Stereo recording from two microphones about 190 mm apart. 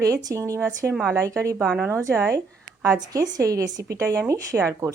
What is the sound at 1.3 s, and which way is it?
Speech, 15° right (ahead or behind).